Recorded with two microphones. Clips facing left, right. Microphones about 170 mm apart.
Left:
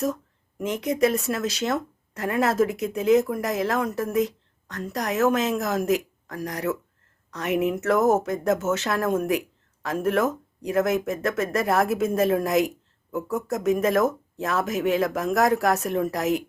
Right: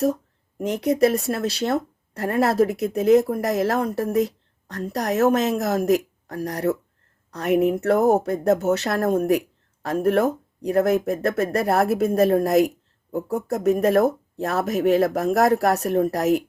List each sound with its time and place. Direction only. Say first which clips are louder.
0.6 s speech: right 3 dB; 35° right (ahead or behind)